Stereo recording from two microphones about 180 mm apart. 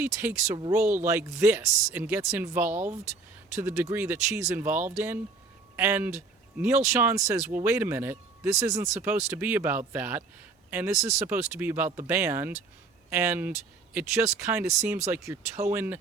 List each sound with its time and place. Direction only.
0.0 s speech: 10° right (ahead or behind)